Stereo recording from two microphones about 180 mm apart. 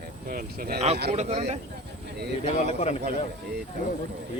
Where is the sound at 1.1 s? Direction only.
35° right (ahead or behind).